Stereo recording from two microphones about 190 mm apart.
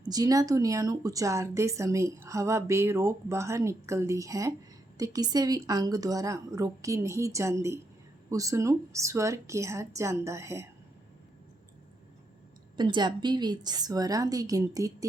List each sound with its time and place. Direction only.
0.0 s speech: 20° right (ahead or behind)
12.7 s a woman's voice: 25° right (ahead or behind)